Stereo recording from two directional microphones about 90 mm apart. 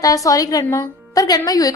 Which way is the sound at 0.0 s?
40° left (ahead or behind).